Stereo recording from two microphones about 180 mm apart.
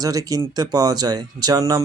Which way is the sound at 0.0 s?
20° right (ahead or behind).